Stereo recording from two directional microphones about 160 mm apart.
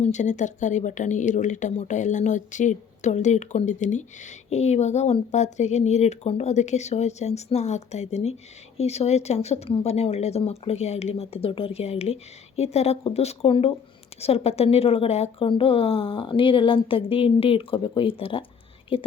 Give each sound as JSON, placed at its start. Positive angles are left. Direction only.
{"t": 0.0, "sound": "speech", "side_deg": 45}